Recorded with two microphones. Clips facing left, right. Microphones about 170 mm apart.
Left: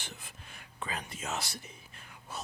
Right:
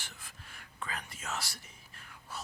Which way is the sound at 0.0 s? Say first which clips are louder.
Left 4 dB; 20° left (ahead or behind).